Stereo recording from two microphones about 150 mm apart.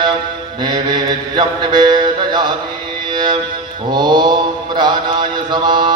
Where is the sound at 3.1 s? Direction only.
30° right (ahead or behind).